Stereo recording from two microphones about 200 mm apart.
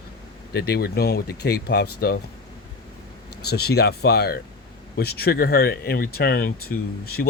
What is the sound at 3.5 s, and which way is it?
Speech, 55° left (ahead or behind).